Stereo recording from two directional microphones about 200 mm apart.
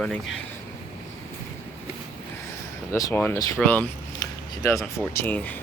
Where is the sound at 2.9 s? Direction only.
15° left (ahead or behind).